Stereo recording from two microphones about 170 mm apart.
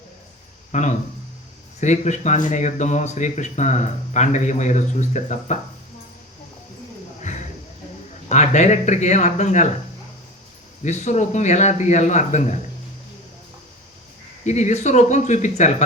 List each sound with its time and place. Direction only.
0.7 s speech: 45° left (ahead or behind)
7.2 s bird: 45° left (ahead or behind)
8.3 s speech: 45° left (ahead or behind)
10.8 s speech: 40° left (ahead or behind)
14.4 s speech: 40° left (ahead or behind)